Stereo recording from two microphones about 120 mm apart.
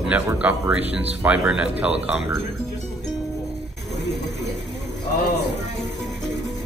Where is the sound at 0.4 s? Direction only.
10° right (ahead or behind).